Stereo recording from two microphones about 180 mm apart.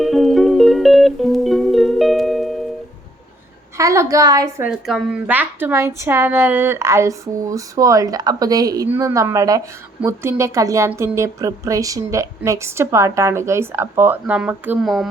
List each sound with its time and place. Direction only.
0.0 s music: centre (ahead or behind)
3.8 s speech: 15° right (ahead or behind)
4.7 s speech: 5° right (ahead or behind)